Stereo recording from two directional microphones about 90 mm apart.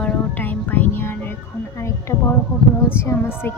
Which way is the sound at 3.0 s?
30° left (ahead or behind).